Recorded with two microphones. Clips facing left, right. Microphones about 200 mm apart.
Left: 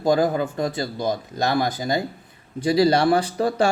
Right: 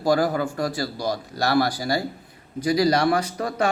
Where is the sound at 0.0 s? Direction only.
20° left (ahead or behind).